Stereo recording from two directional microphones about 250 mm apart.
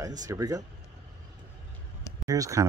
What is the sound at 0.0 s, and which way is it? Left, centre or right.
Speech, centre.